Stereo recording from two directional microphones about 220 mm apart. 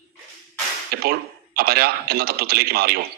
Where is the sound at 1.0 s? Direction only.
45° right (ahead or behind).